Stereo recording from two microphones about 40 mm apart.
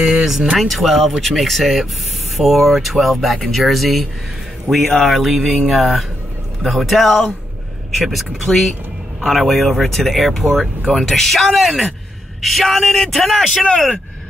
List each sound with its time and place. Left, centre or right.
0.0 s a sound: right
0.6 s speech: centre
7.1 s speech: centre